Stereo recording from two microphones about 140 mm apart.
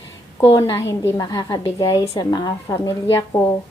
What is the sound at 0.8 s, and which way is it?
A woman's voice, 20° left (ahead or behind).